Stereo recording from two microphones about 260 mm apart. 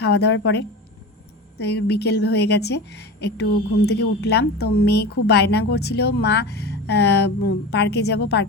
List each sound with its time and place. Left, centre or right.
0.0 s speech: left
1.5 s speech: left